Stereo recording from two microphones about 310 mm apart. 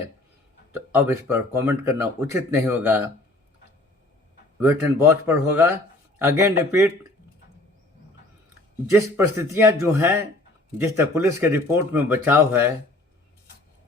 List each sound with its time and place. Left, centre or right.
0.9 s speech: centre
4.6 s speech: centre
9.0 s speech: centre